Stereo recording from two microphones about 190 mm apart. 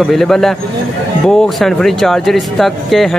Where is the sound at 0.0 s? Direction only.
Centre (ahead or behind).